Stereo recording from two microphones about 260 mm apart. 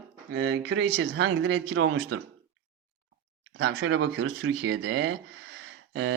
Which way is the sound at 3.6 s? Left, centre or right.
Right.